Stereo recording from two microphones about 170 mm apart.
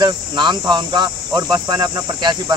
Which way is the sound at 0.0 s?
25° right (ahead or behind).